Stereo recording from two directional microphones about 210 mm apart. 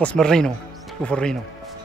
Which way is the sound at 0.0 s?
5° left (ahead or behind).